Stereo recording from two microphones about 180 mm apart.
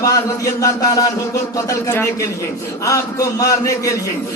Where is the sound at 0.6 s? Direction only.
20° left (ahead or behind).